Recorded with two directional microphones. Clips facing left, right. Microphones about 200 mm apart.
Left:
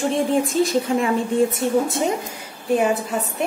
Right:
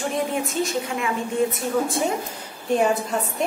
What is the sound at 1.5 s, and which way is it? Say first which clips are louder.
Speech: left 3 dB; 20° left (ahead or behind).